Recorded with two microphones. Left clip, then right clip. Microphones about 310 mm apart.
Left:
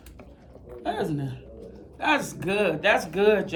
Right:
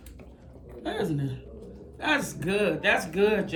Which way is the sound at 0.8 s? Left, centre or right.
Centre.